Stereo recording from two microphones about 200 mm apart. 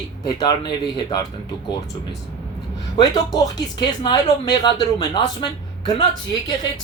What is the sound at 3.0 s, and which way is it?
Speech, 20° left (ahead or behind).